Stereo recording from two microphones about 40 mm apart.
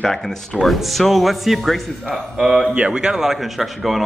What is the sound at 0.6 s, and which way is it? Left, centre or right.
Speech, centre.